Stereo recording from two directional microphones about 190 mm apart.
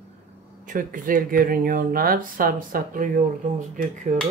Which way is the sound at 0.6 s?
45° right (ahead or behind).